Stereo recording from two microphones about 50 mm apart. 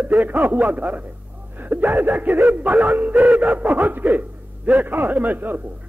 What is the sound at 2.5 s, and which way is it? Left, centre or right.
A man's voice, right.